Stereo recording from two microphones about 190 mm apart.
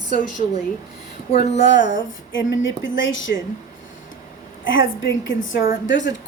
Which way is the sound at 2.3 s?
80° left.